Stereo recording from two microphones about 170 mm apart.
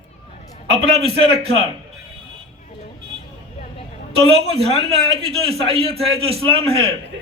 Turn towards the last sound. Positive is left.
turn(degrees=-35)  # may be behind; listen again after turning